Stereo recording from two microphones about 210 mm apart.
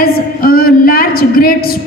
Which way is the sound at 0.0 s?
45° left (ahead or behind).